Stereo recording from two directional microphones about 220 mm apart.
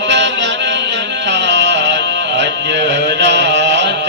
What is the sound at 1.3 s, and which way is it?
Music, 55° right (ahead or behind).